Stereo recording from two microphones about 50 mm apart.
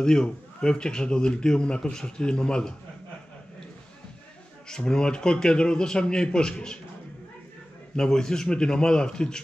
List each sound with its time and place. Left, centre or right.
0.0 s a man's voice: centre
4.6 s a man's voice: centre
7.9 s a man's voice: centre